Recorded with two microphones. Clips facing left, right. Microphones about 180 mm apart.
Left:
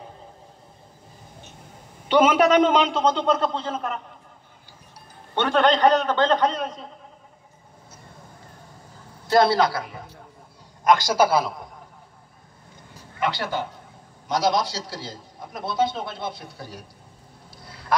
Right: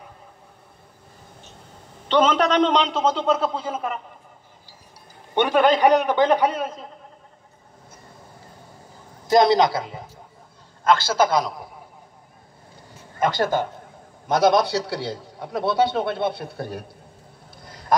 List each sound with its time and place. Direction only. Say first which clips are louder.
2.0 s a man's voice: left 2 dB; 10° left (ahead or behind)
5.3 s a man's voice: right 2 dB; 10° right (ahead or behind)
9.3 s a man's voice: right 2 dB; 20° right (ahead or behind)
10.8 s a man's voice: even; 15° left (ahead or behind)
13.2 s a man's voice: right 5 dB; 45° right (ahead or behind)